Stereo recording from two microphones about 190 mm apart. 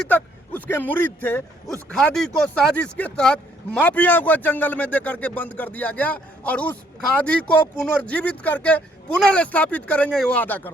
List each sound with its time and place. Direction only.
0.1 s speech: 10° left (ahead or behind)